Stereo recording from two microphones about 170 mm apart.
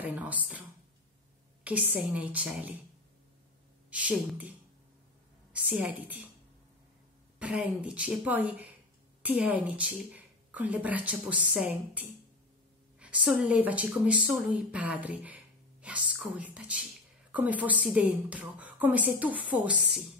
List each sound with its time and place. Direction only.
0.0 s a woman's voice: 10° right (ahead or behind)
3.9 s a woman's voice: 5° right (ahead or behind)
7.3 s a woman's voice: 10° right (ahead or behind)